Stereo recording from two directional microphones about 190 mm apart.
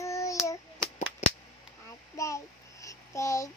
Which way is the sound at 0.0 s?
15° left (ahead or behind).